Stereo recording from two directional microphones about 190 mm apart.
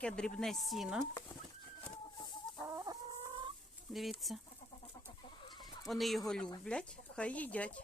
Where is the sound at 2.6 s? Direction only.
15° right (ahead or behind).